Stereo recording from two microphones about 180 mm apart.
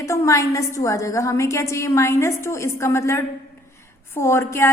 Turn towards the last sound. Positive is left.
turn(degrees=15)  # may be behind; listen again after turning